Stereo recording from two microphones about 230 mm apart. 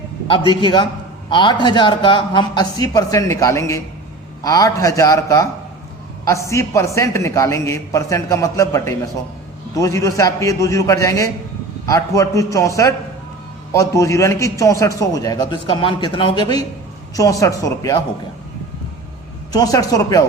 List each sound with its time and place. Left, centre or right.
0.3 s a man's voice: centre
19.5 s a man's voice: centre